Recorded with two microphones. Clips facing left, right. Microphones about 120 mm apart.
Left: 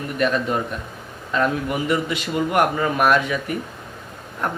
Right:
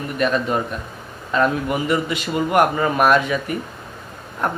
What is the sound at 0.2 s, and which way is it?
A man's voice, 35° right (ahead or behind).